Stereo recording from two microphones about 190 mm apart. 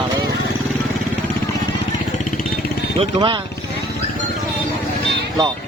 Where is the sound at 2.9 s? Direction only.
25° right (ahead or behind).